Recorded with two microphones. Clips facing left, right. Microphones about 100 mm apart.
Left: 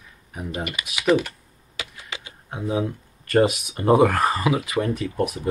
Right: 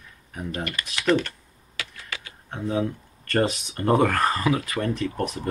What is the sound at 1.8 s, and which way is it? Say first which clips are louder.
Typewriter: left 1 dB; 20° left (ahead or behind).